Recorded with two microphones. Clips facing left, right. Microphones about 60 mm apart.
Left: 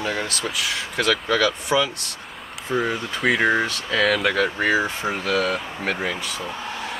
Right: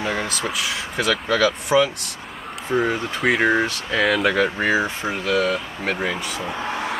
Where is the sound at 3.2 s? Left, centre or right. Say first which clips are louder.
Right 1 dB; centre.